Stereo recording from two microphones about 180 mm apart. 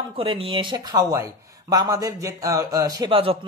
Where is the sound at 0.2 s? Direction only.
30° right (ahead or behind).